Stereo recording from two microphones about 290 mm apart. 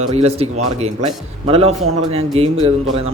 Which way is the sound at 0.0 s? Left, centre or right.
Right.